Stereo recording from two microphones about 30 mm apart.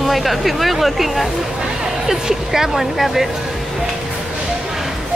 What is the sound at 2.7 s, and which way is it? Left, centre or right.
Speech, centre.